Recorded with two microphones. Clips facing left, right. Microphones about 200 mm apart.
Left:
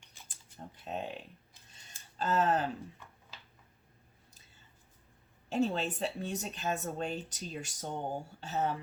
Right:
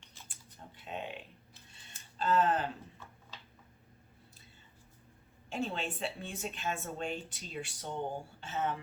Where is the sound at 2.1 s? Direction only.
40° left (ahead or behind).